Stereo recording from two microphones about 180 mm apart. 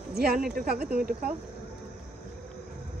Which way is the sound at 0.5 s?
55° right (ahead or behind).